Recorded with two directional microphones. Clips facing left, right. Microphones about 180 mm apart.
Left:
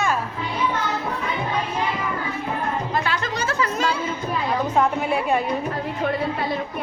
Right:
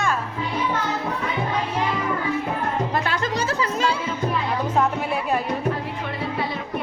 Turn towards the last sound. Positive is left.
turn(degrees=0)  # may be behind; listen again after turning